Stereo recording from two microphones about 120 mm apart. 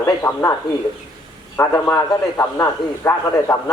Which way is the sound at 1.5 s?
25° left (ahead or behind).